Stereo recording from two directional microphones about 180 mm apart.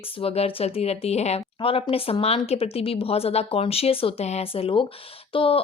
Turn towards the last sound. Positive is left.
turn(degrees=30)  # may be behind; listen again after turning